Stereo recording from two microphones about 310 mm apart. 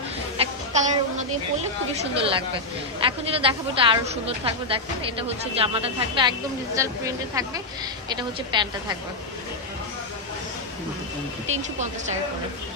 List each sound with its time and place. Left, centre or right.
0.3 s a sound: right
2.0 s a woman's voice: centre
11.5 s speech: right